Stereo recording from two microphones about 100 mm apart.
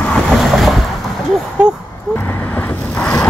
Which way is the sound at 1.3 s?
10° right (ahead or behind).